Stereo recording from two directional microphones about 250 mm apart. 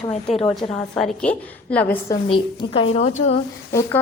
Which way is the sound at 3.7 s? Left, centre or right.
Centre.